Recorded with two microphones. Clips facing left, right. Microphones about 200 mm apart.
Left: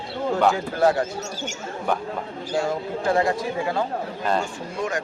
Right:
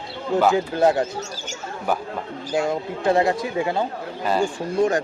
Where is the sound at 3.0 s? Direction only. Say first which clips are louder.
Right 3 dB; 20° right (ahead or behind).